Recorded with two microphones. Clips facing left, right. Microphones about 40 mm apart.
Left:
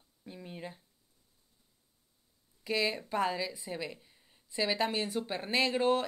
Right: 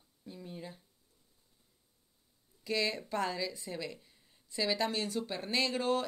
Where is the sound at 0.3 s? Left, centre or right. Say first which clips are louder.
Left 2 dB; left.